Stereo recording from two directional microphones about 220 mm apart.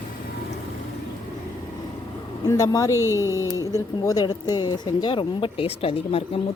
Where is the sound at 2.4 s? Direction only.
15° left (ahead or behind).